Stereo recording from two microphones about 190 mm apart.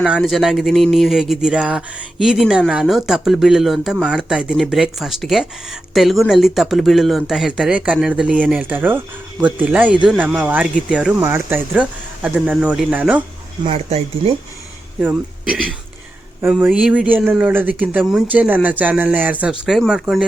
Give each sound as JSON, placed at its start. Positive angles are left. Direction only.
{"t": 0.0, "sound": "speech", "side_deg": 0}
{"t": 13.7, "sound": "speech", "side_deg": -30}
{"t": 16.4, "sound": "speech", "side_deg": -10}